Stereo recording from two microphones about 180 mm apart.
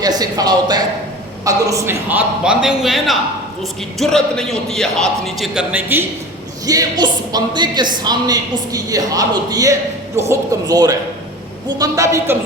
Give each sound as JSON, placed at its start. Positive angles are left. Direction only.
{"t": 0.0, "sound": "a man's voice", "side_deg": -20}
{"t": 6.7, "sound": "a man's voice", "side_deg": -20}